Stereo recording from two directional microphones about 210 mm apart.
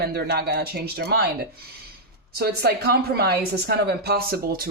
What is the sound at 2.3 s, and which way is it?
Speech, 50° right (ahead or behind).